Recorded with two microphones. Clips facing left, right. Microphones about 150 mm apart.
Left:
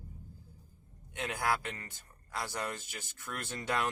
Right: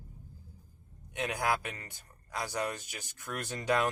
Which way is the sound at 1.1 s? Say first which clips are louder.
Right 2 dB; 15° right (ahead or behind).